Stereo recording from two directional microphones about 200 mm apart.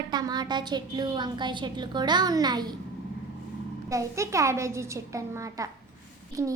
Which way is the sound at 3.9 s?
15° right (ahead or behind).